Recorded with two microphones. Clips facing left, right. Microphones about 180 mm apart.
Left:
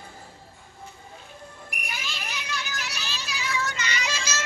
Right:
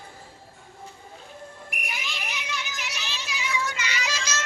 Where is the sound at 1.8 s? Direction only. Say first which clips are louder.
Right 1 dB; 20° right (ahead or behind); by 4.4 s 5° left (ahead or behind).